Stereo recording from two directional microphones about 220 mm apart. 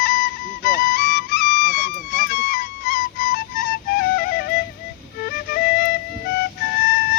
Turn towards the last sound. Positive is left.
turn(degrees=45)  # may be behind; listen again after turning